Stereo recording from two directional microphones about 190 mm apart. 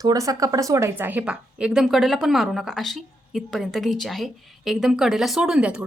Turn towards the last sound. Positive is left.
turn(degrees=-5)  # may be behind; listen again after turning